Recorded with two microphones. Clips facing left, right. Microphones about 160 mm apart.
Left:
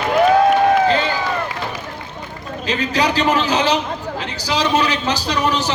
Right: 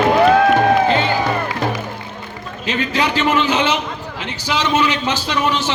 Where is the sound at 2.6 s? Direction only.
35° left (ahead or behind).